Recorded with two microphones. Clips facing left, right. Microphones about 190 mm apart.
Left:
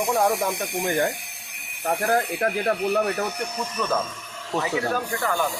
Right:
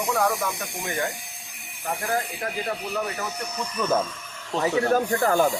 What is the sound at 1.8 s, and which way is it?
Speech, 60° left (ahead or behind).